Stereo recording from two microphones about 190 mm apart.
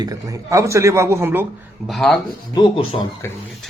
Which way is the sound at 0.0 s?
20° right (ahead or behind).